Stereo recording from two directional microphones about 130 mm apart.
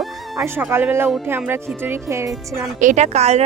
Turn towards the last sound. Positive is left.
turn(degrees=-60)  # may be behind; listen again after turning